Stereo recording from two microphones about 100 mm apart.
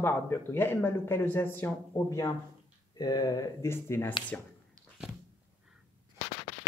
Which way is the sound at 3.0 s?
40° left (ahead or behind).